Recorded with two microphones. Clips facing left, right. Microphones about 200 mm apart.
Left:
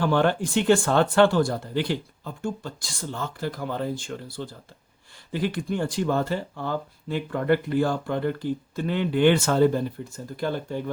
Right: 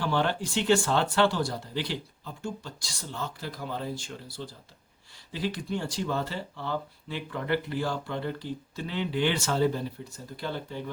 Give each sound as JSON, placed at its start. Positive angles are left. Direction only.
{"t": 0.0, "sound": "speech", "side_deg": 50}